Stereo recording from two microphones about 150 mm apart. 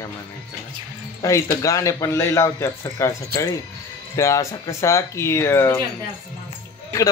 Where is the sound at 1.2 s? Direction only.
20° left (ahead or behind).